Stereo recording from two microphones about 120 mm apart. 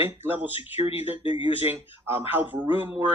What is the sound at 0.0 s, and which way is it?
Speech, 15° right (ahead or behind).